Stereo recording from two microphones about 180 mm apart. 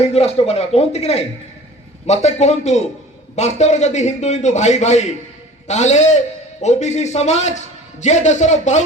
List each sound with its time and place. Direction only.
0.0 s a man's voice: 35° left (ahead or behind)